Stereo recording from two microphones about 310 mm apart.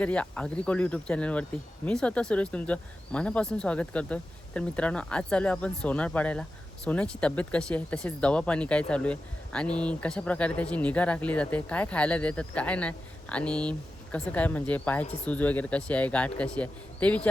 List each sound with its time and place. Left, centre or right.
0.0 s speech: centre
15.0 s speech: left
15.3 s speech: centre